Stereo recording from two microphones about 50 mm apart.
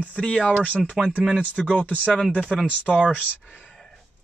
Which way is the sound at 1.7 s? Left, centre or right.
Left.